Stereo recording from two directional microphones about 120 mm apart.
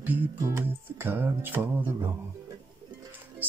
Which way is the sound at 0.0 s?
15° right (ahead or behind).